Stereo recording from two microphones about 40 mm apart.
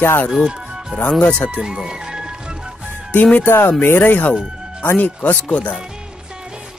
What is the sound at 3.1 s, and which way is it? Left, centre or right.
Speech, left.